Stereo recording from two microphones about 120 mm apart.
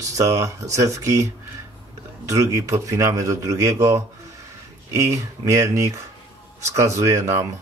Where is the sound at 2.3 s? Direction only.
25° right (ahead or behind).